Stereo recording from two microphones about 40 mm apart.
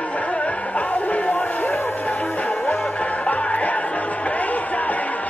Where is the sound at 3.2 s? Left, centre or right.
Left.